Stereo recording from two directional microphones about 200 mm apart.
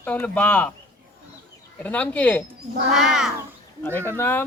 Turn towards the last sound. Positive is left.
turn(degrees=10)  # may be behind; listen again after turning